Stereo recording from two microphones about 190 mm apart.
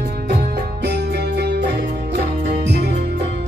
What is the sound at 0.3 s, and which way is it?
Music, 60° right (ahead or behind).